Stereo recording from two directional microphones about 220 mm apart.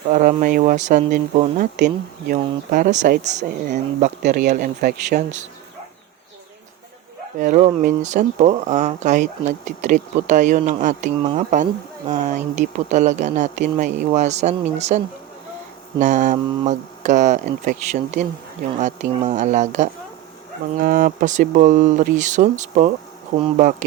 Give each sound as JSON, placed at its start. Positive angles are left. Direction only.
{"t": 0.1, "sound": "speech", "side_deg": -40}
{"t": 7.3, "sound": "speech", "side_deg": -35}
{"t": 23.3, "sound": "speech", "side_deg": -50}